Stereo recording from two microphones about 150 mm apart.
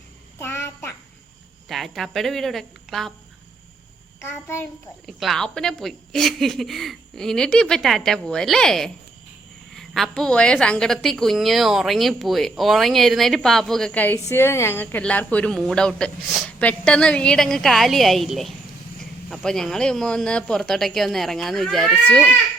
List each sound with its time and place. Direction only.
0.3 s a sound: 15° left (ahead or behind)
1.6 s a woman's voice: centre (ahead or behind)
4.2 s a child's voice: 15° left (ahead or behind)
5.0 s a woman's voice: centre (ahead or behind)